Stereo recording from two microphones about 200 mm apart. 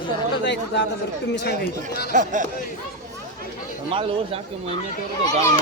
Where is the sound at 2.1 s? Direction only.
40° right (ahead or behind).